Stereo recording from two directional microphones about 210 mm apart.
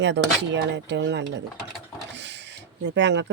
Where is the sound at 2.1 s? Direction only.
55° right (ahead or behind).